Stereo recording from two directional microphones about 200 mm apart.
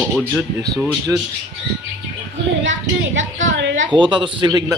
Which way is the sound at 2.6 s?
70° right (ahead or behind).